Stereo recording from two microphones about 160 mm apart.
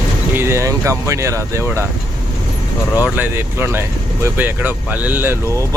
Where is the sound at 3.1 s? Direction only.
15° right (ahead or behind).